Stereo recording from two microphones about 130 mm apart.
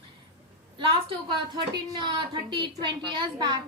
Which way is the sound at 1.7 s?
35° right (ahead or behind).